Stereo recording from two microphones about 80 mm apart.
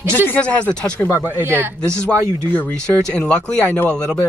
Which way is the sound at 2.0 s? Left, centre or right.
Centre.